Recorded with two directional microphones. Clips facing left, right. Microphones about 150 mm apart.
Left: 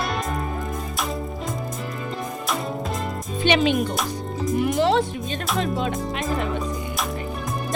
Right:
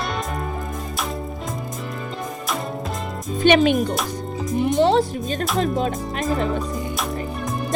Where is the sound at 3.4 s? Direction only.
50° right (ahead or behind).